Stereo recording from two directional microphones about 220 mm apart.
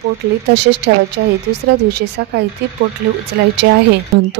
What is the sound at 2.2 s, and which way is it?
Speech, 45° right (ahead or behind).